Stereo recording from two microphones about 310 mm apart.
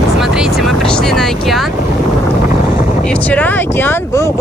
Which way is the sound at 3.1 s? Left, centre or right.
Centre.